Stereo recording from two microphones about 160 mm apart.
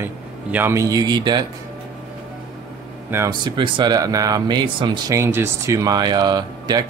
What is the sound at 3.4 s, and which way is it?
Speech, 30° right (ahead or behind).